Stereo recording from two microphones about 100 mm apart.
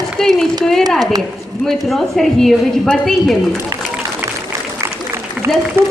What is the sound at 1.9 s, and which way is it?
A woman's voice, 5° left (ahead or behind).